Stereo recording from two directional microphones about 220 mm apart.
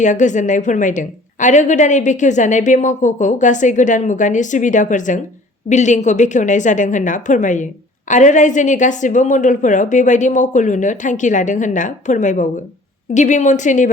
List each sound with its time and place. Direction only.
0.0 s a woman's voice: 35° left (ahead or behind)